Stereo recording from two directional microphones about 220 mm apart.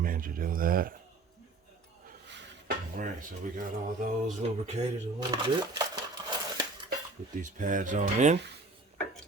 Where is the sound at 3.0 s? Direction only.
40° right (ahead or behind).